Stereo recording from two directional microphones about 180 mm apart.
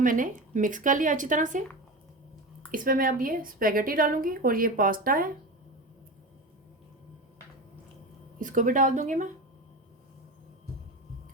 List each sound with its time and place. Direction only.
0.0 s a woman's voice: 50° right (ahead or behind)
2.7 s a woman's voice: 50° right (ahead or behind)
8.4 s a woman's voice: 45° right (ahead or behind)